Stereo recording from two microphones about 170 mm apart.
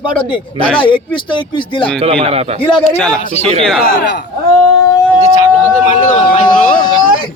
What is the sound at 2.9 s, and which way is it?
Speech, 5° left (ahead or behind).